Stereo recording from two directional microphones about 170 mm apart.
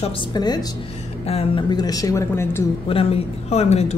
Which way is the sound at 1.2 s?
35° left (ahead or behind).